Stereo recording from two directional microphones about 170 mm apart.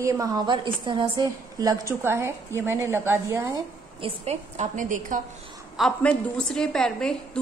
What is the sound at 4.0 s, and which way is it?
A woman's voice, 40° right (ahead or behind).